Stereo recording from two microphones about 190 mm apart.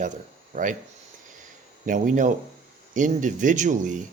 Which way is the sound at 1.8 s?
45° right (ahead or behind).